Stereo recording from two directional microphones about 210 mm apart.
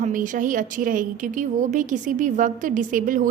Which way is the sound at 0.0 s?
40° right (ahead or behind).